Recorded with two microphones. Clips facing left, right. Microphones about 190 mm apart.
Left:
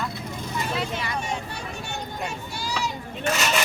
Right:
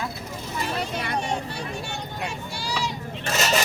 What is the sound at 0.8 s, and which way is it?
Speech, 50° right (ahead or behind).